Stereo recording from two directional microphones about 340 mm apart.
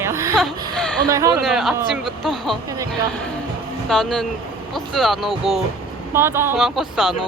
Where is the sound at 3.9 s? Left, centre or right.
Centre.